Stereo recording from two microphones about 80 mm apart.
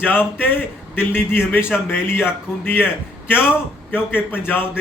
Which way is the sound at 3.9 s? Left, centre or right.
Left.